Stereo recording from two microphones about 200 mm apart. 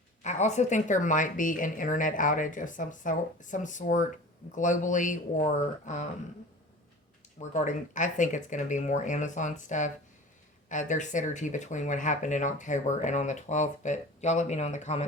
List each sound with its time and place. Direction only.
0.2 s speech: 35° left (ahead or behind)
7.3 s speech: 35° left (ahead or behind)